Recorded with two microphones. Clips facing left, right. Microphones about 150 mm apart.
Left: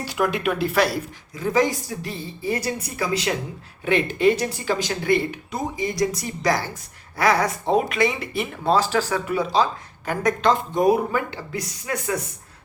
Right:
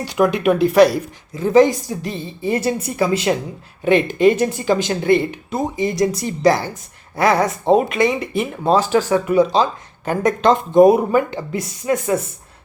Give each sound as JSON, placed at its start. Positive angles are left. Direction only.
{"t": 0.0, "sound": "speech", "side_deg": -20}